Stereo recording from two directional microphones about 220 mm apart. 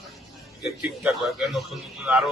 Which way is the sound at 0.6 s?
5° right (ahead or behind).